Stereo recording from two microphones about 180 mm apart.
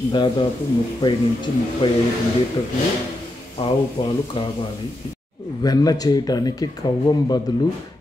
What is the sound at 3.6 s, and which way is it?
Speech, 30° left (ahead or behind).